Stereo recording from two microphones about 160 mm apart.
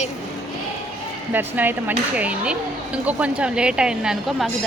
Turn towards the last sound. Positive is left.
turn(degrees=-5)  # may be behind; listen again after turning